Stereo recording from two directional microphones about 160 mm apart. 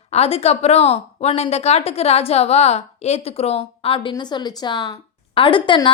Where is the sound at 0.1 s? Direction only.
40° left (ahead or behind).